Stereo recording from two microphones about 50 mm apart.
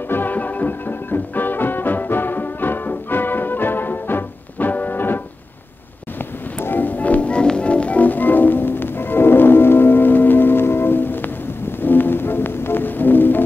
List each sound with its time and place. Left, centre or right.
0.1 s music: left